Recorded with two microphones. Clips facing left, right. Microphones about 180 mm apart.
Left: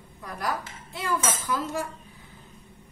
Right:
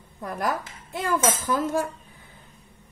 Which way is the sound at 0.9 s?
50° right (ahead or behind).